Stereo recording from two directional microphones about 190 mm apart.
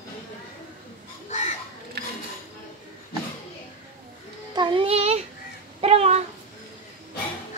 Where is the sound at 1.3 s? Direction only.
35° left (ahead or behind).